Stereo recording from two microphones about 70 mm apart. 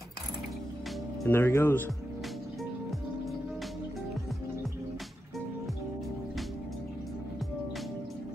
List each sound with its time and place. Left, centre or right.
1.2 s speech: left